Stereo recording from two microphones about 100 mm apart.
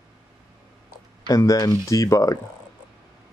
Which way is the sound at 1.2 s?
35° left (ahead or behind).